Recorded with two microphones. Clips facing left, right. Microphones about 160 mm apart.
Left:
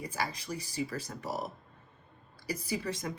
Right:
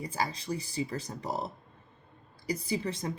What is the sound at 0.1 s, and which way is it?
A woman's voice, 25° right (ahead or behind).